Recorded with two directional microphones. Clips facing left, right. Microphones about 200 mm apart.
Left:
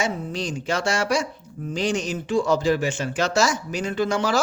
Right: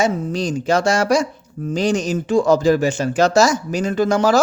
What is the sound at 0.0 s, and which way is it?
Speech, 40° right (ahead or behind).